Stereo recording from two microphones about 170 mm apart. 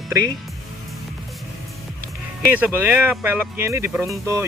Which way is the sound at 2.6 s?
10° right (ahead or behind).